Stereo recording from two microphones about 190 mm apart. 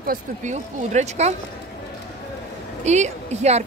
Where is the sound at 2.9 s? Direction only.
35° right (ahead or behind).